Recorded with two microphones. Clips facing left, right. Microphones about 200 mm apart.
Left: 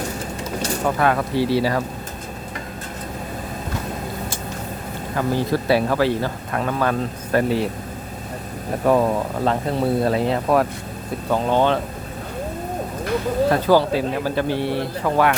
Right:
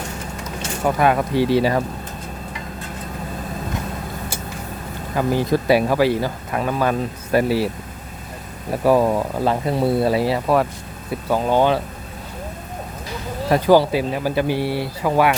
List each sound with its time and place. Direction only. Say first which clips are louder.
0.9 s speech: right 3 dB; 15° right (ahead or behind)
5.1 s speech: right 2 dB; 15° right (ahead or behind)
8.8 s speech: right 2 dB; 5° right (ahead or behind)
13.5 s speech: right 4 dB; 15° right (ahead or behind)